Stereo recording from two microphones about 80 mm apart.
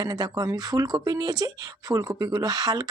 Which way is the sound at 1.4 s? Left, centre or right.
Right.